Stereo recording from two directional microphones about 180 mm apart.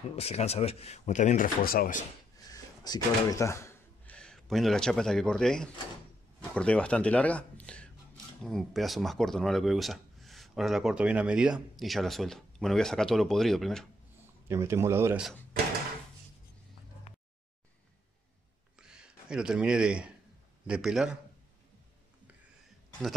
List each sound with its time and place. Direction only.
0.1 s speech: 35° left (ahead or behind)
2.3 s a sound: 20° left (ahead or behind); by 5.7 s 5° left (ahead or behind)
6.5 s speech: 5° left (ahead or behind)
14.5 s speech: 15° right (ahead or behind)
18.8 s a sound: 5° right (ahead or behind)
20.6 s speech: 5° right (ahead or behind)